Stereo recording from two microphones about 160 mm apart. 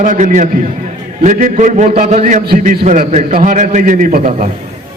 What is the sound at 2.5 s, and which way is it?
A man's voice, 55° right (ahead or behind).